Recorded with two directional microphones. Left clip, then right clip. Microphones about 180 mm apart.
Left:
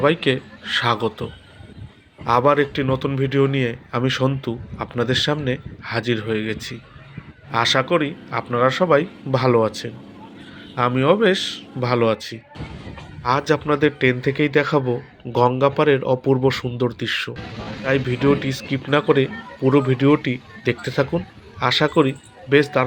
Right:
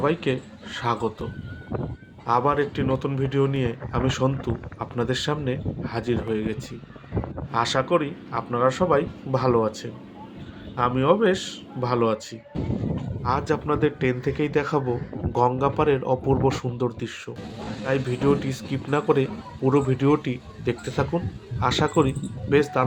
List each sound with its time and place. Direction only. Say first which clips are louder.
0.0 s speech: left 6 dB; 15° left (ahead or behind)